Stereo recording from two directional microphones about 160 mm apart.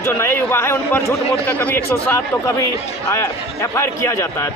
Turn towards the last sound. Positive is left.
turn(degrees=20)  # may be behind; listen again after turning